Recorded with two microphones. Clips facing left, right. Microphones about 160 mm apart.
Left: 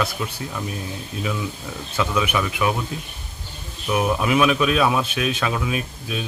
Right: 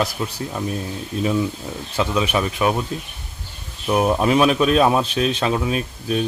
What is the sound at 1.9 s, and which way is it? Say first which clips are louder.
Speech: right 2 dB; 30° right (ahead or behind).